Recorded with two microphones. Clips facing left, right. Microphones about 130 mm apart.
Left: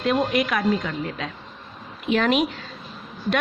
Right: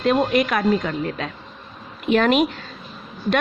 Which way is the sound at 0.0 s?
45° right (ahead or behind).